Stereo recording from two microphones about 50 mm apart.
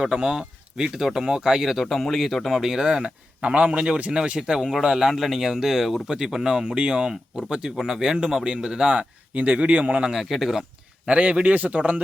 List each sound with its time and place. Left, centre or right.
0.0 s speech: centre
3.4 s a man's voice: right
9.3 s a man's voice: right
10.1 s speech: centre
11.0 s a man's voice: right